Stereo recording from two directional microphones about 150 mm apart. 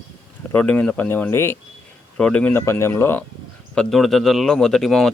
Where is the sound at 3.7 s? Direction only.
5° left (ahead or behind).